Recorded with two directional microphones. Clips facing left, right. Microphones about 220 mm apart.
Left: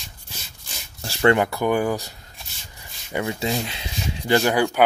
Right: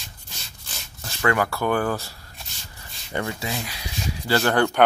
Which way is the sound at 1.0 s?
30° left (ahead or behind).